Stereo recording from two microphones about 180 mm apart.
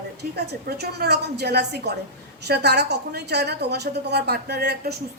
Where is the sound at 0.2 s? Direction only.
65° right (ahead or behind).